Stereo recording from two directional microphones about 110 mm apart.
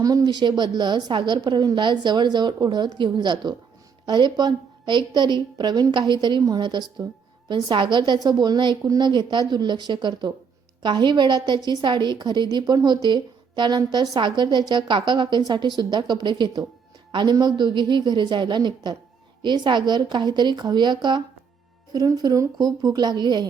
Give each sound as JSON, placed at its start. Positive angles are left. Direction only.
{"t": 0.0, "sound": "a woman's voice", "side_deg": -35}